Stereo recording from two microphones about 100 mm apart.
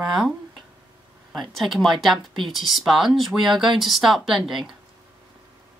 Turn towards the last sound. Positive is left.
turn(degrees=-5)  # may be behind; listen again after turning